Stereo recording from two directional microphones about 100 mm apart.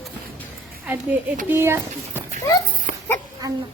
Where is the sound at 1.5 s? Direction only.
25° right (ahead or behind).